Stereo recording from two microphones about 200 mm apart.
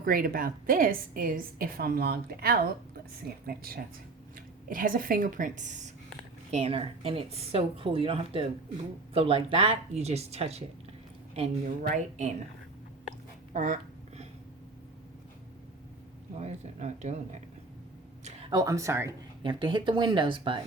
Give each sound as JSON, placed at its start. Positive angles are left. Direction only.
{"t": 0.0, "sound": "a woman's voice", "side_deg": -45}
{"t": 13.5, "sound": "speech", "side_deg": -40}
{"t": 16.4, "sound": "speech", "side_deg": -35}
{"t": 18.5, "sound": "speech", "side_deg": -15}
{"t": 19.4, "sound": "speech", "side_deg": -25}